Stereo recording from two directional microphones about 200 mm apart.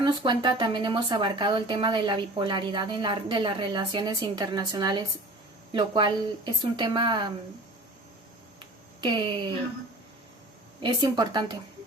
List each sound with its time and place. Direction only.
0.0 s speech: 20° right (ahead or behind)
8.5 s a sound: 20° right (ahead or behind)
10.8 s speech: 20° right (ahead or behind)